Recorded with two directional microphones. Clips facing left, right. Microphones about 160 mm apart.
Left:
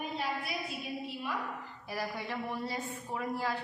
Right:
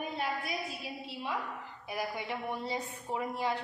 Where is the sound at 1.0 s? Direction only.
25° right (ahead or behind).